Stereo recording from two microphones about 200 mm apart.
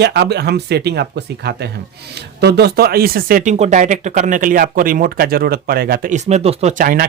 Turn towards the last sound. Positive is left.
turn(degrees=-45)  # may be behind; listen again after turning